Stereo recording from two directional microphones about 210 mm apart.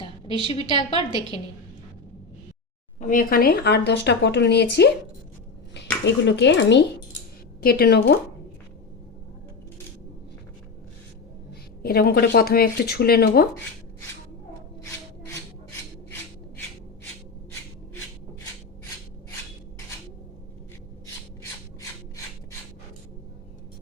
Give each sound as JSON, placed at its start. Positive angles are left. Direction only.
{"t": 0.3, "sound": "a woman's voice", "side_deg": 25}
{"t": 0.7, "sound": "a woman's voice", "side_deg": -20}
{"t": 3.0, "sound": "speech", "side_deg": 40}
{"t": 6.2, "sound": "speech", "side_deg": 55}
{"t": 11.8, "sound": "speech", "side_deg": 45}